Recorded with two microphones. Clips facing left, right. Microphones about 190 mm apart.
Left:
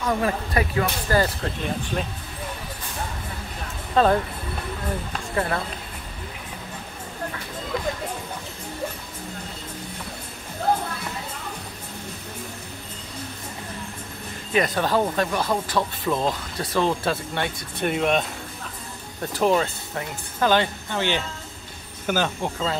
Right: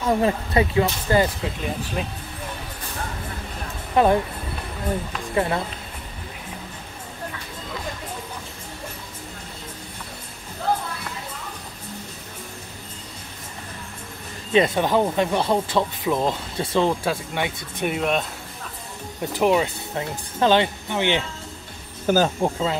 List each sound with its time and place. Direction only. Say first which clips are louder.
0.0 s speech: right 3 dB; 25° right (ahead or behind)
1.4 s speech: even; 5° right (ahead or behind)
3.9 s speech: right 1 dB; 15° right (ahead or behind)
5.3 s speech: right 3 dB; 20° right (ahead or behind)
14.5 s speech: right 3 dB; 20° right (ahead or behind)
17.0 s speech: right 1 dB; 10° right (ahead or behind)
17.9 s speech: left 2 dB; centre (ahead or behind)
19.3 s speech: right 1 dB; 15° right (ahead or behind)
22.0 s speech: right 5 dB; 40° right (ahead or behind)